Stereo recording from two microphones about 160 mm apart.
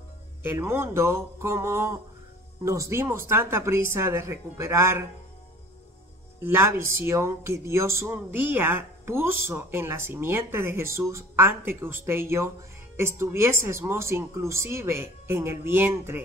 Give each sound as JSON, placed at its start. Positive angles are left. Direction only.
{"t": 0.4, "sound": "speech", "side_deg": -15}
{"t": 6.4, "sound": "speech", "side_deg": -15}